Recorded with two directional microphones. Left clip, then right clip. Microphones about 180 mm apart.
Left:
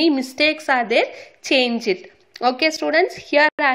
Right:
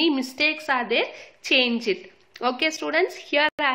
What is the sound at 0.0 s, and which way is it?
A woman's voice, 25° left (ahead or behind).